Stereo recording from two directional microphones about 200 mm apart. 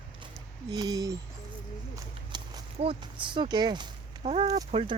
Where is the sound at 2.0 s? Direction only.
20° right (ahead or behind).